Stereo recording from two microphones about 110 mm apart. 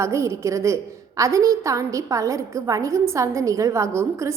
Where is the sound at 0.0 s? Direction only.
25° right (ahead or behind).